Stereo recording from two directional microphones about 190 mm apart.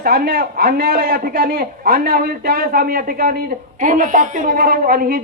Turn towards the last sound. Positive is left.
turn(degrees=-50)  # may be behind; listen again after turning